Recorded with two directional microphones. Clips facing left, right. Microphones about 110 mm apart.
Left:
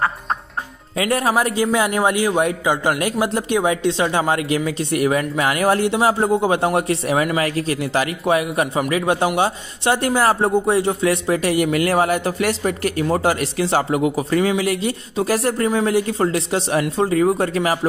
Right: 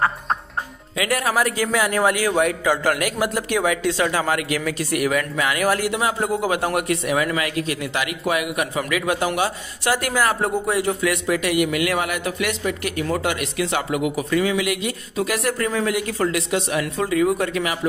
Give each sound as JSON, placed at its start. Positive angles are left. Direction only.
{"t": 0.9, "sound": "a man's voice", "side_deg": 30}